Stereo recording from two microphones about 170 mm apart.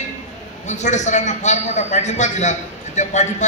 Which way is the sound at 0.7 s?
45° left (ahead or behind).